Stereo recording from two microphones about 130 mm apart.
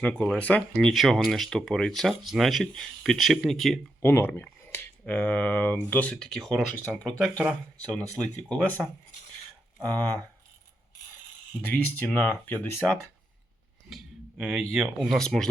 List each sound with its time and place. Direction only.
0.0 s speech: 5° left (ahead or behind)
4.0 s speech: 15° left (ahead or behind)
11.6 s speech: 10° left (ahead or behind)
13.9 s speech: 5° right (ahead or behind)